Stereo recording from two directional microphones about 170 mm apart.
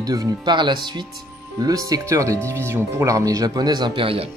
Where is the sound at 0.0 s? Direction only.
20° right (ahead or behind).